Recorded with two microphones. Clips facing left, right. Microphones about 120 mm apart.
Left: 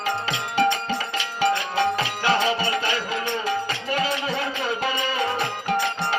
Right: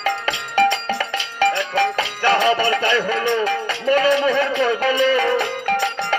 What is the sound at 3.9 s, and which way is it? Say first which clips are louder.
Speech: right 9 dB; 60° right (ahead or behind).